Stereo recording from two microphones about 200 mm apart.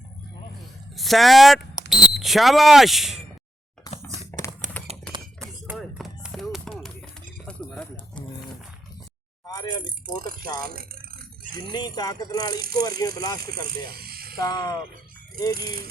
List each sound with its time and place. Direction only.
0.9 s speech: centre (ahead or behind)
3.9 s a sound: 20° left (ahead or behind)
5.1 s a sound: 15° right (ahead or behind)
5.7 s a sound: centre (ahead or behind)
9.8 s speech: 45° right (ahead or behind)
10.6 s rattle: 45° right (ahead or behind)
11.7 s speech: 20° left (ahead or behind)
12.5 s speech: 50° right (ahead or behind)
13.0 s speech: 20° left (ahead or behind)
13.8 s electric shaver: 50° right (ahead or behind)
14.4 s speech: 20° left (ahead or behind)
15.5 s speech: 50° right (ahead or behind)